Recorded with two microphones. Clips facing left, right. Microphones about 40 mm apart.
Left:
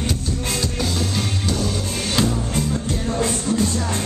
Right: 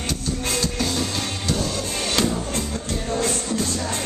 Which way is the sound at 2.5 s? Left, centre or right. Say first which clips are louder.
Left 4 dB; centre.